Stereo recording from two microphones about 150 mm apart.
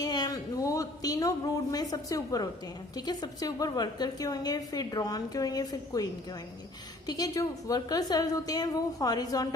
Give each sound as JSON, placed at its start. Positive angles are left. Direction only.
{"t": 0.0, "sound": "a woman's voice", "side_deg": 25}
{"t": 7.1, "sound": "a woman's voice", "side_deg": 25}